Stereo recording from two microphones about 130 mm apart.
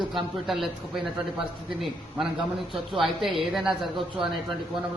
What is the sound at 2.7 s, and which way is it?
A man's voice, centre (ahead or behind).